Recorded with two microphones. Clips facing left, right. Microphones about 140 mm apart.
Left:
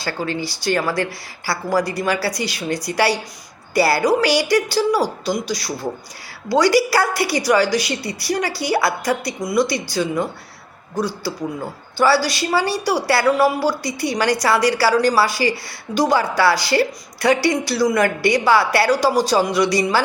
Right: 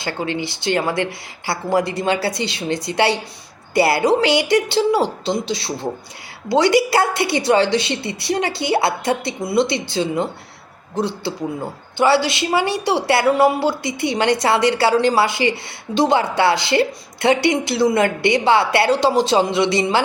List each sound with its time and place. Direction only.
0.0 s a woman's voice: 20° right (ahead or behind)